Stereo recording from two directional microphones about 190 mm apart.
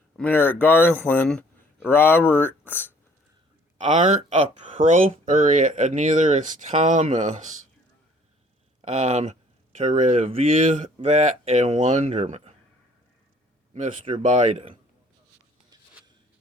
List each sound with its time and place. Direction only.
0.2 s speech: 10° left (ahead or behind)
3.8 s speech: 40° right (ahead or behind)
8.8 s speech: 40° right (ahead or behind)
14.2 s speech: 40° right (ahead or behind)